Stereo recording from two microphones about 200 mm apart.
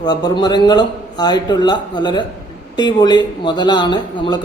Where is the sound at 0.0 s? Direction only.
20° left (ahead or behind).